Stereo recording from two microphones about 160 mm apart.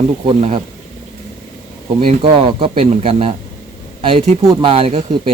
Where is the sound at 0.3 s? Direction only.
35° right (ahead or behind).